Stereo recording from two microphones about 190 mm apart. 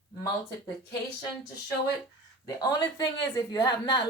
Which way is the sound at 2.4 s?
20° left (ahead or behind).